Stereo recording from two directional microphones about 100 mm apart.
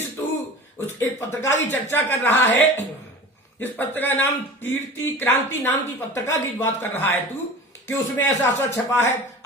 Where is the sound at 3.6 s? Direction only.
20° left (ahead or behind).